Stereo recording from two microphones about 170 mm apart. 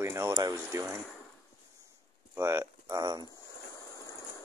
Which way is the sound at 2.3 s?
15° right (ahead or behind).